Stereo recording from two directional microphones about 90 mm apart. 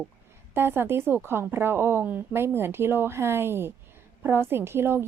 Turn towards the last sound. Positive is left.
turn(degrees=-25)  # may be behind; listen again after turning